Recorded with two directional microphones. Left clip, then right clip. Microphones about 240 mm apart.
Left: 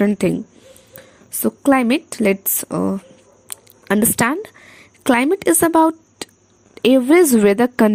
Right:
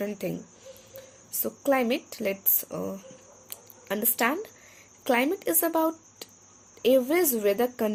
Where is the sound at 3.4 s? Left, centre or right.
Left.